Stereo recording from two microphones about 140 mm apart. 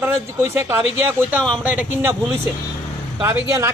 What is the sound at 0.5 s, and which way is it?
A man's voice, 15° right (ahead or behind).